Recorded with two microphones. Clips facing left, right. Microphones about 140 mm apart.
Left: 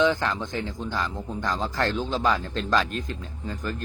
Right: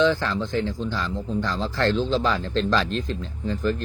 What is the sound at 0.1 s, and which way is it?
Speech, 15° left (ahead or behind).